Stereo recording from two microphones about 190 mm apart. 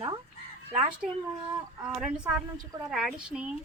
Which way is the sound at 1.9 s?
5° right (ahead or behind).